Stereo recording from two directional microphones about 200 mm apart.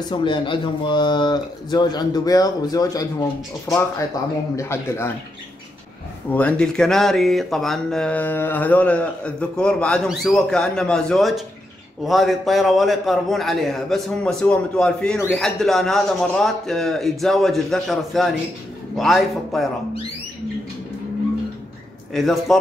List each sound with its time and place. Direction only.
0.1 s speech: 25° left (ahead or behind)
6.3 s speech: 5° left (ahead or behind)
22.1 s speech: centre (ahead or behind)